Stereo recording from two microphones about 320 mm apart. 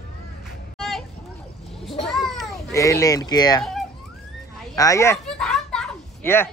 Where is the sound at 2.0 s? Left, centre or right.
Centre.